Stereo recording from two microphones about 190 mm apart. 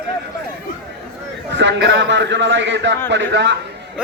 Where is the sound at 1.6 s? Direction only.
70° right (ahead or behind).